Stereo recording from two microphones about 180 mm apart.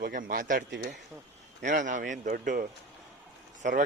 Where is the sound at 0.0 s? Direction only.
50° right (ahead or behind).